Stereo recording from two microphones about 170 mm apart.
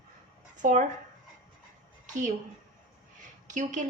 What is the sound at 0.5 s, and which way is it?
Speech, 45° right (ahead or behind).